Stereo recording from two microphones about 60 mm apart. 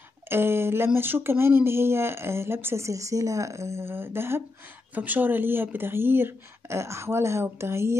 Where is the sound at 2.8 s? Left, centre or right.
Right.